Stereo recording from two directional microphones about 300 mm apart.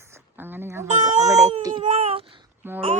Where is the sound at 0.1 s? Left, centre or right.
Centre.